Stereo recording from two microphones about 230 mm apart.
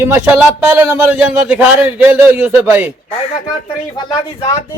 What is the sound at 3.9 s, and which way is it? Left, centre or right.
Speech, centre.